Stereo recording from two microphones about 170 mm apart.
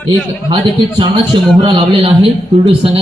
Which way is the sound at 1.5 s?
30° right (ahead or behind).